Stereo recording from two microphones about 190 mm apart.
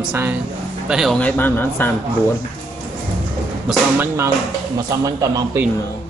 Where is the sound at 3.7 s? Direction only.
10° right (ahead or behind).